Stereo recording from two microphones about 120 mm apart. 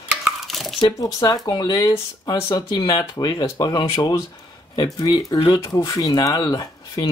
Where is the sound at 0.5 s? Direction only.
Centre (ahead or behind).